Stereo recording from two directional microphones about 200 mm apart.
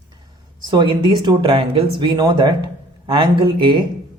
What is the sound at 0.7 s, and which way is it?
Speech, 20° right (ahead or behind).